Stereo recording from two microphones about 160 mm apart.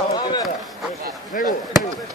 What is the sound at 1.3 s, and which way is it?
Speech, 60° left (ahead or behind).